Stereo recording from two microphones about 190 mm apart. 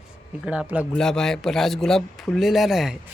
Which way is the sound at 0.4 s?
5° right (ahead or behind).